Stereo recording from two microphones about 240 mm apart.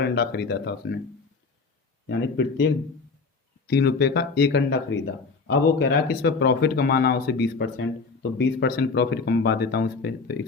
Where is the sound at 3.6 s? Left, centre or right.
Left.